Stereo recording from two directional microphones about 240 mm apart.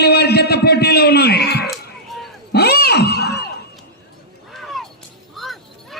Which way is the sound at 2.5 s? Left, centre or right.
Left.